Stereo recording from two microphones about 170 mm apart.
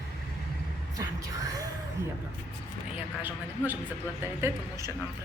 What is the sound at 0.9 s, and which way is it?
Speech, 20° right (ahead or behind).